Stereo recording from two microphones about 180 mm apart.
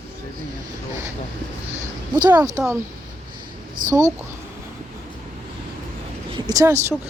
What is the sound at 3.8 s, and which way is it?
Speech, 50° right (ahead or behind).